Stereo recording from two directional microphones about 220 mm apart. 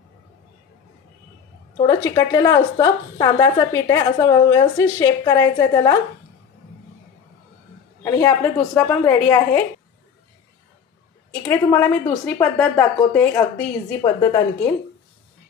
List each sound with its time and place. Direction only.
1.8 s a woman's voice: 15° left (ahead or behind)
8.0 s a woman's voice: 15° left (ahead or behind)
11.4 s a woman's voice: 10° left (ahead or behind)